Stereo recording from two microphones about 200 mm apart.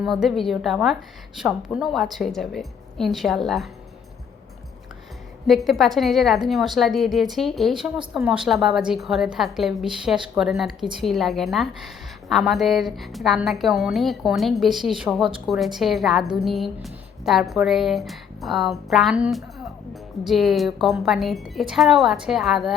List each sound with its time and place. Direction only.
0.0 s speech: centre (ahead or behind)
5.5 s speech: centre (ahead or behind)